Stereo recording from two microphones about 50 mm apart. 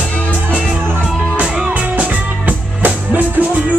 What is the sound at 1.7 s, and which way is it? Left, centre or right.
Music, right.